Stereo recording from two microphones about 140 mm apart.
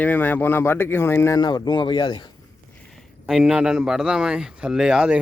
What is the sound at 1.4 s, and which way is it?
Speech, 30° left (ahead or behind).